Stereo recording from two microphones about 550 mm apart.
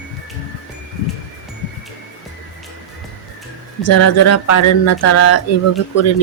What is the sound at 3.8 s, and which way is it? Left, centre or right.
Speech, left.